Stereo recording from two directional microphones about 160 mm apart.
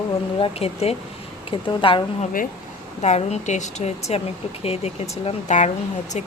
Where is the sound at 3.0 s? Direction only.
45° left (ahead or behind).